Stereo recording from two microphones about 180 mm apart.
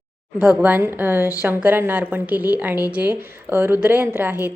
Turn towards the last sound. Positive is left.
turn(degrees=-10)  # may be behind; listen again after turning